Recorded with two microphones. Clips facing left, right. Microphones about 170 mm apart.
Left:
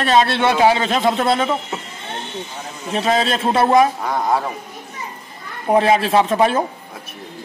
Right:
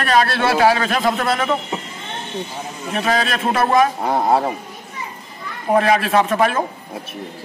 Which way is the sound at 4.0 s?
30° right (ahead or behind).